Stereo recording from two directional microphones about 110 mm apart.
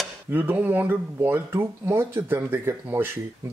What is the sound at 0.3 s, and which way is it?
Speech, 15° right (ahead or behind).